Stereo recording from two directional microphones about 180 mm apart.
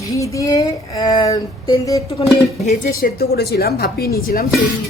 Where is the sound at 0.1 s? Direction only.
15° left (ahead or behind).